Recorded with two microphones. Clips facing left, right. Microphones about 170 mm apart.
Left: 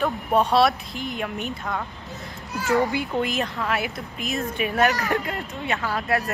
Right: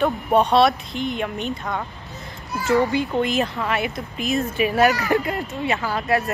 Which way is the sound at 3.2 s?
Centre (ahead or behind).